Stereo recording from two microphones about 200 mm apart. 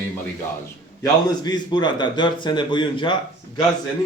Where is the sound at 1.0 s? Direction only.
20° left (ahead or behind).